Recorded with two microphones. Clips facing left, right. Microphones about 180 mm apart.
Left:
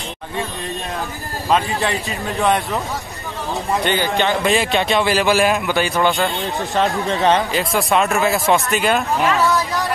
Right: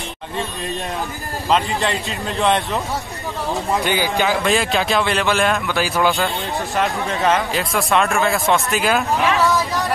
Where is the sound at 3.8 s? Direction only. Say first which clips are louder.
Left 1 dB; 10° right (ahead or behind).